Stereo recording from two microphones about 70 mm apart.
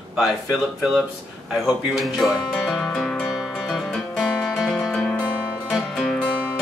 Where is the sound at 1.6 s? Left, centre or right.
Centre.